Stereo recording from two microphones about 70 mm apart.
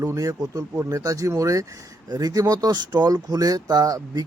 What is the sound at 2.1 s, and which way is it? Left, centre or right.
Speech, right.